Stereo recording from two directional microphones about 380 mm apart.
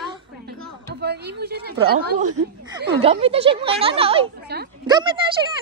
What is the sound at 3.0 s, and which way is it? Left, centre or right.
A man's voice, centre.